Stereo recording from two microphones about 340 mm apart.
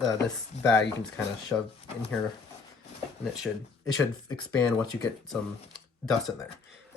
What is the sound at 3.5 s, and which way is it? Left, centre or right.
Speech, centre.